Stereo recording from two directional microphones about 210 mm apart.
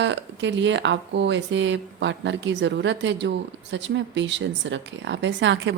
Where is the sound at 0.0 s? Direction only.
60° right (ahead or behind).